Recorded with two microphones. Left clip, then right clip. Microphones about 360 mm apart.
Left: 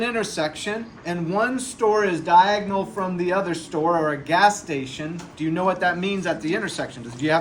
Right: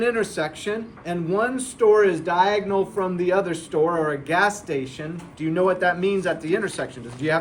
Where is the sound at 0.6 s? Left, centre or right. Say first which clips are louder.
Even; centre.